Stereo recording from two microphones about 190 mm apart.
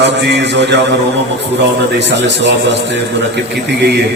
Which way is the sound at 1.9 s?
65° right (ahead or behind).